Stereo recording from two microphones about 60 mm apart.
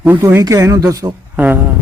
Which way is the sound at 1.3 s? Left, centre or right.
Right.